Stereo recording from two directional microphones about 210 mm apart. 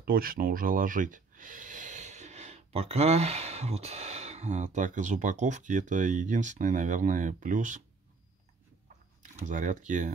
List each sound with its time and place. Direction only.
0.0 s speech: 45° right (ahead or behind)
9.5 s speech: 35° right (ahead or behind)